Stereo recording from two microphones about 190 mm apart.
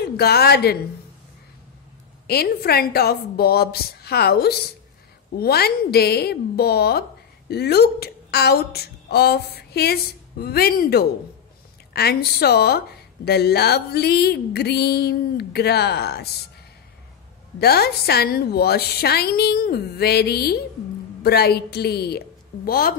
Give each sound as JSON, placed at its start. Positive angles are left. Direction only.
{"t": 0.0, "sound": "a woman's voice", "side_deg": 55}
{"t": 2.2, "sound": "a woman's voice", "side_deg": 55}
{"t": 17.6, "sound": "a woman's voice", "side_deg": 55}